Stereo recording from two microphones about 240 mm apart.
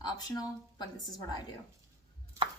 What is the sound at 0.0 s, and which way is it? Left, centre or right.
A woman's voice, centre.